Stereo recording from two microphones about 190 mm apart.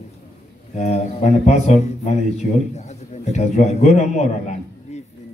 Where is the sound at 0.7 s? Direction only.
35° left (ahead or behind).